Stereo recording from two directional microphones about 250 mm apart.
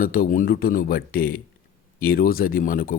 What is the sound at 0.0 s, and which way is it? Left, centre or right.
Speech, left.